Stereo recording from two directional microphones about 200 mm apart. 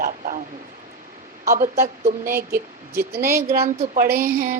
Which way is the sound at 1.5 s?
45° right (ahead or behind).